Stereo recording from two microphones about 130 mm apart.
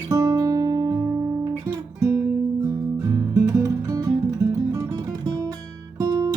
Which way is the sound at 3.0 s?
30° right (ahead or behind).